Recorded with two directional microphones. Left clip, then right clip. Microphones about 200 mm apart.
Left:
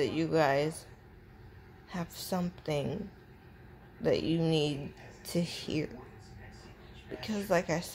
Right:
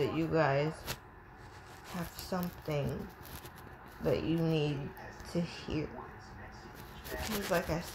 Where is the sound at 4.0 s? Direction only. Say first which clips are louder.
Left 3 dB; 15° left (ahead or behind).